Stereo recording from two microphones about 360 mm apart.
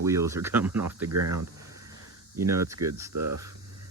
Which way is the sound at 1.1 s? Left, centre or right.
Right.